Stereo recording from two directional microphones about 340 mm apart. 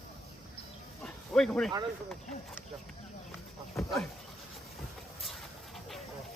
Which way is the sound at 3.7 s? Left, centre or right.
Centre.